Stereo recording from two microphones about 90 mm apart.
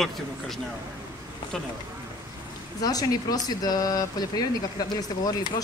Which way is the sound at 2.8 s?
45° left (ahead or behind).